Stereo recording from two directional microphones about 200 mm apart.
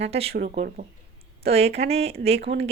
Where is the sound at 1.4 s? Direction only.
30° right (ahead or behind).